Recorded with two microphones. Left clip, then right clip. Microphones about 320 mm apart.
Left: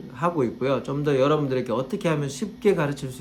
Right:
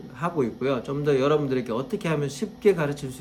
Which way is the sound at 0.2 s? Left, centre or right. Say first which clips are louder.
Left 2 dB; centre.